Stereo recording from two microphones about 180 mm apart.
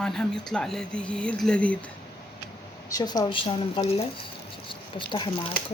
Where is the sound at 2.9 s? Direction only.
20° left (ahead or behind).